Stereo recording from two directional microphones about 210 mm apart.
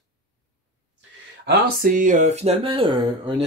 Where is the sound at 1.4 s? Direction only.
40° right (ahead or behind); by 3.3 s 25° right (ahead or behind).